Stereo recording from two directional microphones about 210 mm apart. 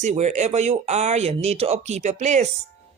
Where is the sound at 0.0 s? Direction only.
35° right (ahead or behind).